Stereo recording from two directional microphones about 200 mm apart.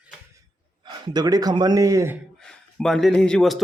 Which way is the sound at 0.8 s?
20° right (ahead or behind).